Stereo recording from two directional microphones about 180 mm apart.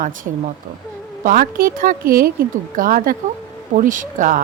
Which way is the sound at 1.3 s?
55° right (ahead or behind).